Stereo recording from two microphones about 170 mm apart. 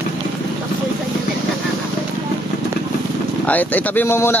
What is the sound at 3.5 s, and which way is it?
Speech, 10° left (ahead or behind).